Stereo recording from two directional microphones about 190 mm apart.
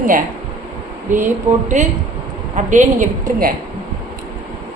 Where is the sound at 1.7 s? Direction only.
40° right (ahead or behind).